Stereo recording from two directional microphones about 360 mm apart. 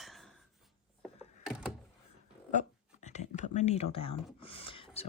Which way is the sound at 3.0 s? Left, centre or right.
Centre.